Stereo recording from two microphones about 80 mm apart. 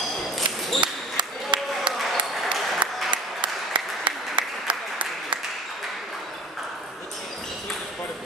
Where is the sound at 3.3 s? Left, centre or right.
Right.